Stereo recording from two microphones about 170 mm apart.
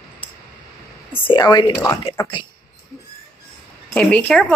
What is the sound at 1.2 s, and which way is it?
Speech, 25° left (ahead or behind).